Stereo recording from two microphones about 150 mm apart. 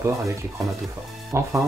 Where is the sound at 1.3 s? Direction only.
15° right (ahead or behind).